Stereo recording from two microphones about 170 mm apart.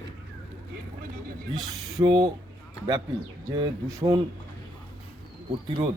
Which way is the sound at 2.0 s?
30° right (ahead or behind).